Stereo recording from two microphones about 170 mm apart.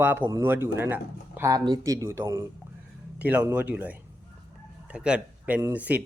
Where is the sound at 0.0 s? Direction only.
10° right (ahead or behind).